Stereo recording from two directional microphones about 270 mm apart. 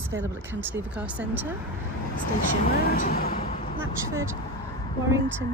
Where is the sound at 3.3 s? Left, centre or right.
Left.